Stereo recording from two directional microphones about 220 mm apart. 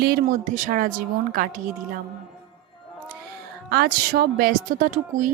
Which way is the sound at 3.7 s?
45° right (ahead or behind).